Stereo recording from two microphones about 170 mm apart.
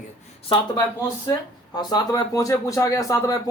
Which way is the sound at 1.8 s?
25° left (ahead or behind).